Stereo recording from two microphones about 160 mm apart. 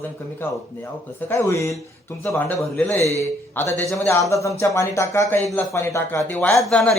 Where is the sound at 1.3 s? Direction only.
15° left (ahead or behind).